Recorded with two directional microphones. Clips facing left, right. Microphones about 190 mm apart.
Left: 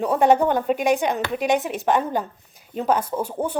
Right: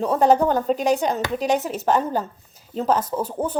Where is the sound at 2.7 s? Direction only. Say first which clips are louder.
Even; 10° left (ahead or behind).